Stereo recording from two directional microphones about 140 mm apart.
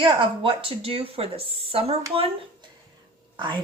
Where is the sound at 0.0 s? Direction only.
35° right (ahead or behind).